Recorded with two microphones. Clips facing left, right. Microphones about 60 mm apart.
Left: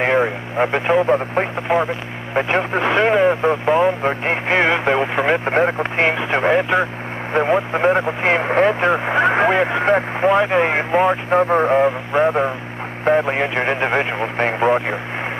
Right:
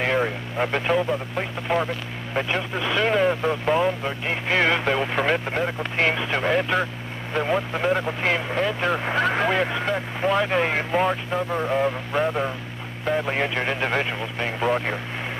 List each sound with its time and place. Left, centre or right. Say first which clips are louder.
0.0 s vehicle: left 6 dB; left
1.0 s speech: left 9 dB; left
1.7 s speech: left 5 dB; centre
2.3 s speech: left 7 dB; left
4.0 s speech: left 7 dB; left
5.4 s speech: left 8 dB; left
8.9 s speech: left 6 dB; left
11.2 s speech: left 9 dB; left
14.2 s speech: left 8 dB; left